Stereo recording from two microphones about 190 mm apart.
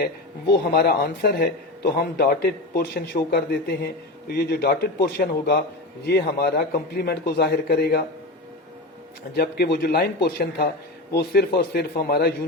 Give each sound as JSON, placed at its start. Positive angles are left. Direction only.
{"t": 0.5, "sound": "a man's voice", "side_deg": 60}
{"t": 9.3, "sound": "a man's voice", "side_deg": 55}